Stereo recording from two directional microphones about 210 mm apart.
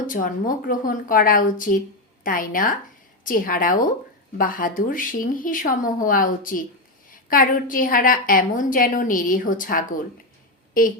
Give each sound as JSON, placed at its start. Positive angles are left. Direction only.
{"t": 0.1, "sound": "a woman's voice", "side_deg": 40}